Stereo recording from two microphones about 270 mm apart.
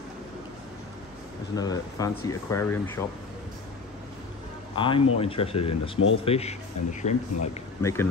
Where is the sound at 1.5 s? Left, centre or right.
Centre.